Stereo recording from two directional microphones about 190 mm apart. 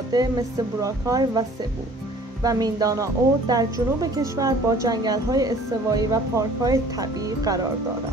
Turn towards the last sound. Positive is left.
turn(degrees=-20)  # may be behind; listen again after turning